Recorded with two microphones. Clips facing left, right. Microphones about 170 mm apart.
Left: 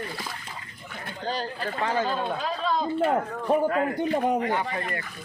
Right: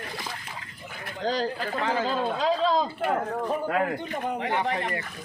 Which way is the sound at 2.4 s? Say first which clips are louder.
Right 4 dB; 90° right.